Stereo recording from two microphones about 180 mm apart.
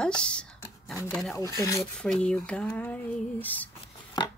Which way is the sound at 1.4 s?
15° left (ahead or behind).